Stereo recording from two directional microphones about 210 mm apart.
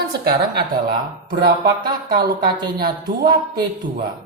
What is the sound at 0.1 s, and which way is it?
Speech, 50° right (ahead or behind).